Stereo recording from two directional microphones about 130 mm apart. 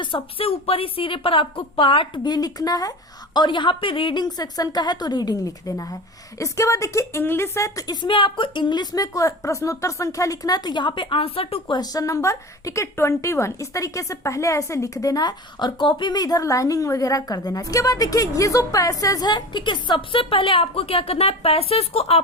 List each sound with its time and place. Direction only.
0.0 s a woman's voice: 40° left (ahead or behind); by 7.9 s 25° left (ahead or behind)
8.0 s a woman's voice: 40° left (ahead or behind)
11.8 s speech: 30° left (ahead or behind); by 22.2 s 50° left (ahead or behind)